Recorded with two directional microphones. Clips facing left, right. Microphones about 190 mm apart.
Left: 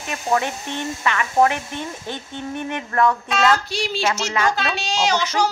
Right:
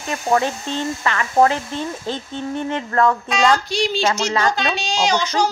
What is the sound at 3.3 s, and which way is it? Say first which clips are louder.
A child's voice: right 1 dB; 5° left (ahead or behind).